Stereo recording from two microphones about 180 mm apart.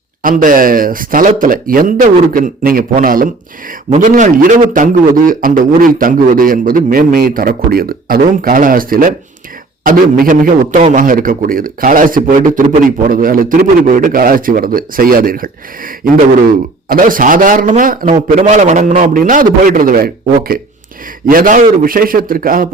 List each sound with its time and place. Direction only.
0.2 s a man's voice: 50° right (ahead or behind)
18.3 s a man's voice: 40° right (ahead or behind)